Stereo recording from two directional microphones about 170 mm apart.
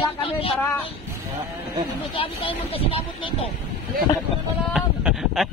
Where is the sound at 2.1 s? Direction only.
30° left (ahead or behind).